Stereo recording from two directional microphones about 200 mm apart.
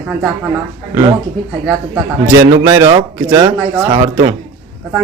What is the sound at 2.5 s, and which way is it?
A man's voice, 20° right (ahead or behind).